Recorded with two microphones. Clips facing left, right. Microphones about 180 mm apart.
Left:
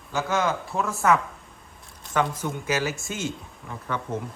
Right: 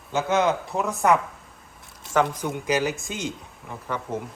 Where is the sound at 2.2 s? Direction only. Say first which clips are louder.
Right 2 dB; 15° right (ahead or behind).